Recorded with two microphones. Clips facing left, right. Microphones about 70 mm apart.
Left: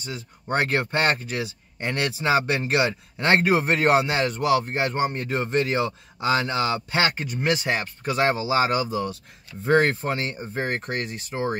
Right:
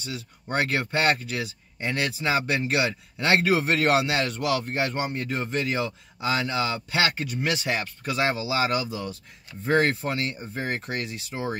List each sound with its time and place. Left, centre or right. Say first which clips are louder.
0.0 s speech: left 1 dB; left
2.9 s speech: left 2 dB; left
5.1 s speech: left 4 dB; left